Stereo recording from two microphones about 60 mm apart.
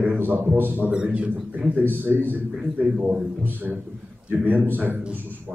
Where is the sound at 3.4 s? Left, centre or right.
Right.